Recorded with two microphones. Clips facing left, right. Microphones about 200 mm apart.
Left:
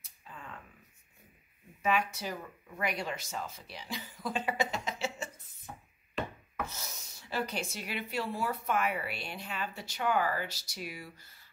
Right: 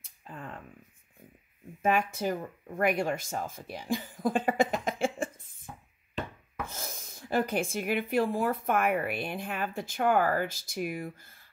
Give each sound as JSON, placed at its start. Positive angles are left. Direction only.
{"t": 0.0, "sound": "a sound", "side_deg": -50}
{"t": 1.8, "sound": "speech", "side_deg": -50}
{"t": 6.7, "sound": "speech", "side_deg": -50}